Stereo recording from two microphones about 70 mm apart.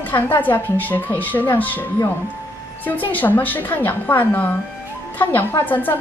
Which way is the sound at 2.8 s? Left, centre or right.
Left.